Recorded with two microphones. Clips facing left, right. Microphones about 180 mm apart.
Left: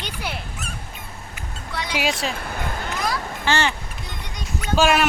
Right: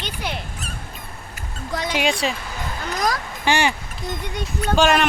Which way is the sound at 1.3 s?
45° right (ahead or behind).